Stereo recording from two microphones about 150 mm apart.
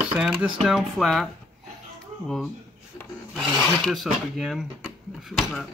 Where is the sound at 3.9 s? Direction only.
Centre (ahead or behind).